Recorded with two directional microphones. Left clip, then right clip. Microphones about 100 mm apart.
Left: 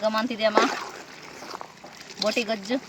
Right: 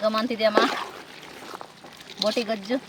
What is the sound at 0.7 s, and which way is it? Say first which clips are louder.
Splash: right 2 dB; centre (ahead or behind).